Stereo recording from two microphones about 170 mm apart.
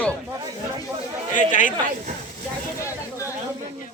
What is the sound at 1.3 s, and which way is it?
Speech, 50° left (ahead or behind).